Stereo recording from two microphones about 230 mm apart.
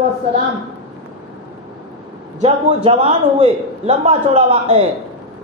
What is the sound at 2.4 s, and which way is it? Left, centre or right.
A man's voice, right.